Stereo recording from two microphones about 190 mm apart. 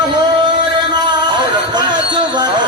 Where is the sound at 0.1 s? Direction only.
25° right (ahead or behind).